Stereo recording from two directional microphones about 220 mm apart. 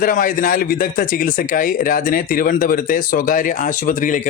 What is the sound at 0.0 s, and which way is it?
Speech, 40° left (ahead or behind).